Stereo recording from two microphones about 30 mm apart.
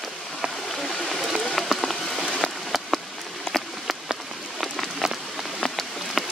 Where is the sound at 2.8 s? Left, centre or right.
Centre.